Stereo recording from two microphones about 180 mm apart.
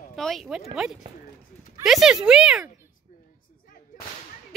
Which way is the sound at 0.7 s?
5° right (ahead or behind).